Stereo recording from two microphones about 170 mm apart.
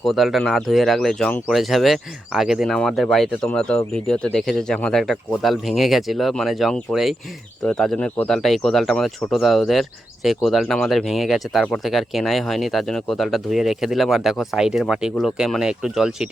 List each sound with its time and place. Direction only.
0.0 s speech: centre (ahead or behind)